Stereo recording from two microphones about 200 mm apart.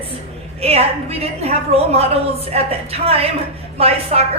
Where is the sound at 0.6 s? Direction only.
30° right (ahead or behind).